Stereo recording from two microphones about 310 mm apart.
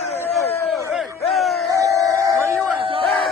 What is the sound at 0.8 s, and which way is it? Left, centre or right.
Crowd, centre.